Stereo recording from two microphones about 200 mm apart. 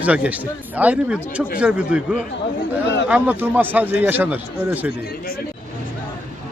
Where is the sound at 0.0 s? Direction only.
5° right (ahead or behind).